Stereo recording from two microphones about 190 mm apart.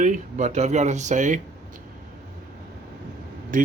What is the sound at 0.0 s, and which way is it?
Speech, 40° right (ahead or behind).